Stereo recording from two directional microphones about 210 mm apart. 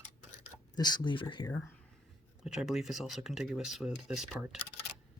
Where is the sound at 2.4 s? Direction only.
Centre (ahead or behind).